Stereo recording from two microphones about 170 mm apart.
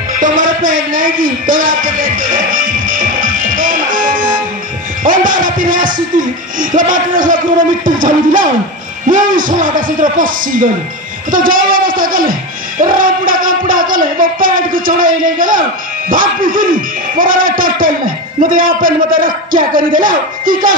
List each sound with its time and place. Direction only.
0.2 s music: 50° right (ahead or behind)
5.0 s a man's voice: 50° right (ahead or behind)